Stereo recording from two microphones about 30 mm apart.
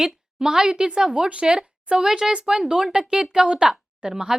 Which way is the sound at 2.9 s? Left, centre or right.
Right.